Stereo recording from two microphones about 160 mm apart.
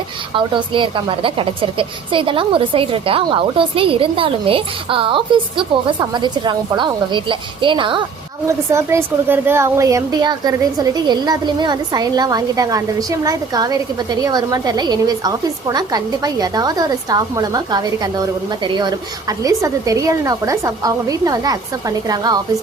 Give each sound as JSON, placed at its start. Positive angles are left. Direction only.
{"t": 0.3, "sound": "a woman's voice", "side_deg": -30}
{"t": 8.4, "sound": "speech", "side_deg": -15}